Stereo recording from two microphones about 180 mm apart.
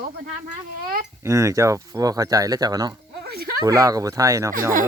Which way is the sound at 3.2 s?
60° right (ahead or behind).